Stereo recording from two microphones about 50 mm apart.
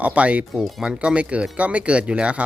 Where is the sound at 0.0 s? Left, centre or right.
Right.